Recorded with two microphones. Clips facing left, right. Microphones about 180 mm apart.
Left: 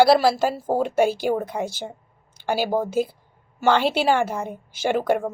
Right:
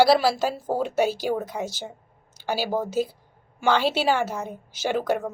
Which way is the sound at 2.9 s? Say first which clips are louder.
Left 2 dB; 50° left (ahead or behind).